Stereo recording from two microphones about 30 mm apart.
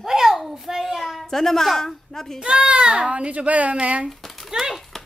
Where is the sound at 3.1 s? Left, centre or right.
Right.